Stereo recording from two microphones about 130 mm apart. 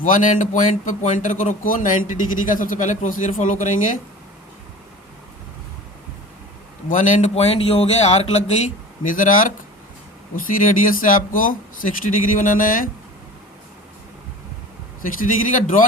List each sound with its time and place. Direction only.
0.0 s speech: 80° left
6.8 s a man's voice: 85° left
7.3 s speech: 50° left (ahead or behind); by 12.9 s 90° left
15.5 s a man's voice: 85° left